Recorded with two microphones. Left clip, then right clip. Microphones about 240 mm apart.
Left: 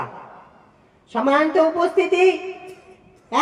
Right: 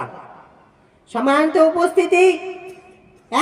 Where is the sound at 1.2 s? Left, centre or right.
Right.